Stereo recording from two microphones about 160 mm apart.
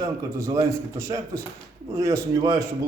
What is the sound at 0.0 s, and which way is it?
A man's voice, 20° right (ahead or behind).